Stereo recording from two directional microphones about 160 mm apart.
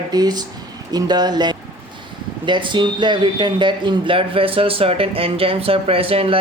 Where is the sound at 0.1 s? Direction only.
25° right (ahead or behind).